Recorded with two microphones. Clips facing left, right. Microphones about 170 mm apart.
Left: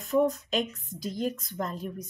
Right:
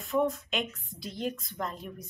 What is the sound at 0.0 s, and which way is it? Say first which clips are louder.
Speech: left 3 dB; 40° left (ahead or behind).